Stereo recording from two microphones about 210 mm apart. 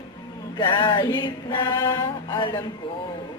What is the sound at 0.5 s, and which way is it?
A woman's voice, 20° left (ahead or behind).